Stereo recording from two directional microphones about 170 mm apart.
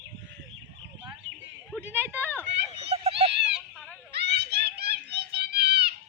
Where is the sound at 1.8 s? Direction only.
10° right (ahead or behind).